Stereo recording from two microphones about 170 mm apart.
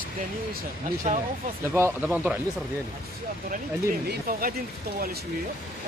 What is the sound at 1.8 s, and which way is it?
Speech, 10° right (ahead or behind).